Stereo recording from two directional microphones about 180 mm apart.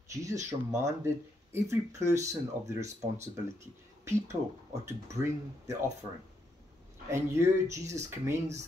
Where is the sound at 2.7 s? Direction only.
40° right (ahead or behind).